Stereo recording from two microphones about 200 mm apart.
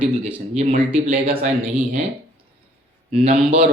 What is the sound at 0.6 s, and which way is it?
Speech, 30° right (ahead or behind).